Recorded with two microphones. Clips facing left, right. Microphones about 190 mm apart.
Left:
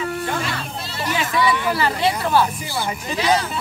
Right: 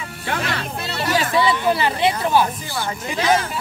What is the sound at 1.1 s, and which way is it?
Speech, 30° right (ahead or behind).